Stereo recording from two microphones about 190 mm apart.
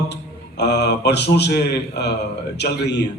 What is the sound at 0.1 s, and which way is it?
A man's voice, 65° left (ahead or behind).